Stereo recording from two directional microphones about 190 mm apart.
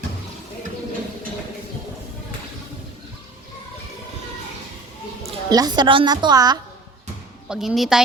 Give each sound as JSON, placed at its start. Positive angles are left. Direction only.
{"t": 5.2, "sound": "a woman's voice", "side_deg": -20}
{"t": 7.4, "sound": "a woman's voice", "side_deg": -5}